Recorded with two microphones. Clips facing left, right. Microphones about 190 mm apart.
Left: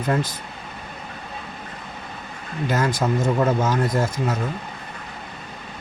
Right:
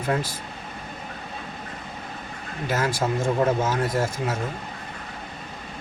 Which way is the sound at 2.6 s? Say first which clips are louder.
Left 3 dB; 5° right (ahead or behind).